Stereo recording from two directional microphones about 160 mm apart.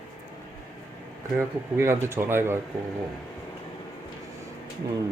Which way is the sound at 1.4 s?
15° right (ahead or behind).